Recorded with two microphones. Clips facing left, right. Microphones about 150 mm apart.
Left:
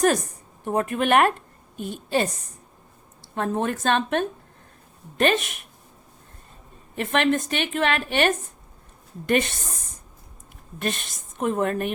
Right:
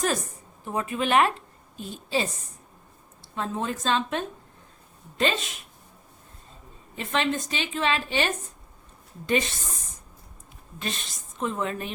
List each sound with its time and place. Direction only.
0.6 s a woman's voice: 55° left (ahead or behind)
3.3 s a woman's voice: 55° left (ahead or behind)
6.9 s a woman's voice: 60° left (ahead or behind)